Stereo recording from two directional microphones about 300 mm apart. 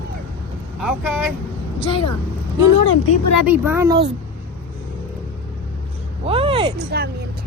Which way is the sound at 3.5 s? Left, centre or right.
Centre.